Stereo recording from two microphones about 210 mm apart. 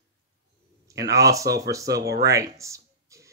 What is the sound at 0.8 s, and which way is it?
Speech, 15° right (ahead or behind).